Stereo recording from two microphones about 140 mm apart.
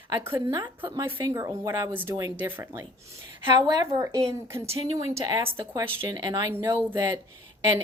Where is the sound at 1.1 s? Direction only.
20° right (ahead or behind).